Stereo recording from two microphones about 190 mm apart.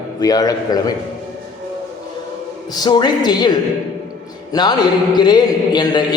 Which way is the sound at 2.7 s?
20° left (ahead or behind).